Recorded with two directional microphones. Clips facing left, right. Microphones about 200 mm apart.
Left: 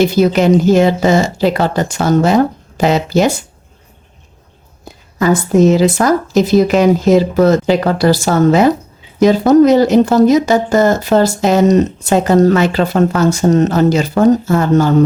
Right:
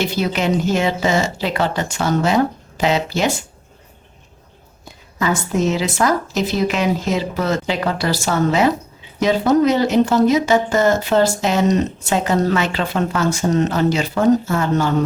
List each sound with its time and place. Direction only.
0.0 s speech: 40° left (ahead or behind)
5.2 s speech: 40° left (ahead or behind)